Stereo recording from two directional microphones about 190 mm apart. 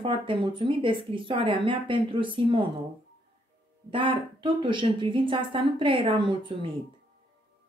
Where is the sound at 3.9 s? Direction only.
25° right (ahead or behind).